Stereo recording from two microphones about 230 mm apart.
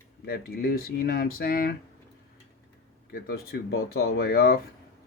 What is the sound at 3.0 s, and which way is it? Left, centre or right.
Speech, left.